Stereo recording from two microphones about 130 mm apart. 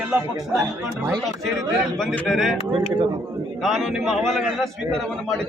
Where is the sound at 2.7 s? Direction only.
40° right (ahead or behind).